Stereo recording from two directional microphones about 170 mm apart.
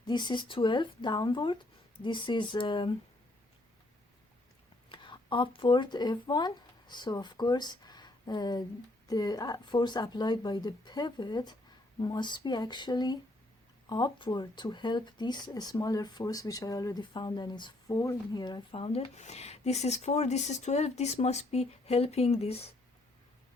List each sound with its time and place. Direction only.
0.0 s speech: 25° left (ahead or behind)
4.9 s speech: 30° left (ahead or behind)